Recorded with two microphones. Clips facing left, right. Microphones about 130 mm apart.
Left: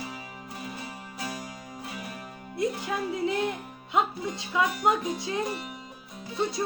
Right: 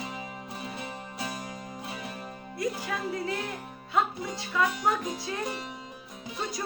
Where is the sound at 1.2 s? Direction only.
25° right (ahead or behind).